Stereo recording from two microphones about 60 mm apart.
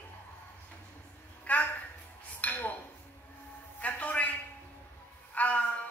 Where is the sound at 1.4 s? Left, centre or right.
Left.